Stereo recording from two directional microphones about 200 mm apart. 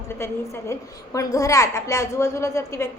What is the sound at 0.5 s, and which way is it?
A woman's voice, 15° left (ahead or behind).